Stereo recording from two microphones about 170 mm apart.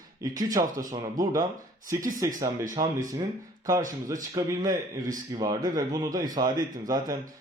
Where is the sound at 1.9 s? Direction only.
50° right (ahead or behind).